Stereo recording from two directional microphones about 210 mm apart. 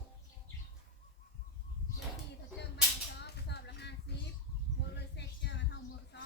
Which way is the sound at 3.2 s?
50° left (ahead or behind).